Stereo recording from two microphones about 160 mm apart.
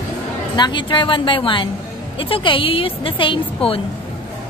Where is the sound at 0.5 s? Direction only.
30° left (ahead or behind).